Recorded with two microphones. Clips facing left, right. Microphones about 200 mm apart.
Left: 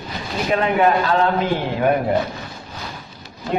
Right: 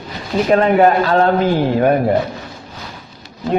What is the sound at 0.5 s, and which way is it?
Speech, 40° right (ahead or behind).